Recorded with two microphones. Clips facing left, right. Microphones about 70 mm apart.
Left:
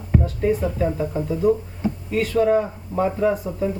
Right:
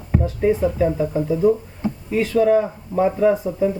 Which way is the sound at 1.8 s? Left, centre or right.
Right.